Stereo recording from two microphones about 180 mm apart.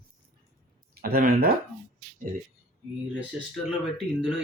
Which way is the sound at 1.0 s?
55° right (ahead or behind).